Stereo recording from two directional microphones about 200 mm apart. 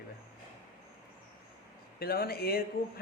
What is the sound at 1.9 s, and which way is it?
Speech, 50° left (ahead or behind).